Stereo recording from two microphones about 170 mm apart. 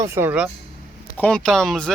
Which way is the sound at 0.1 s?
10° right (ahead or behind).